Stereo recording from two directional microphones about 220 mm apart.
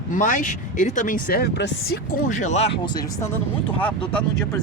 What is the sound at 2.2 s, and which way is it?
Speech, 35° left (ahead or behind).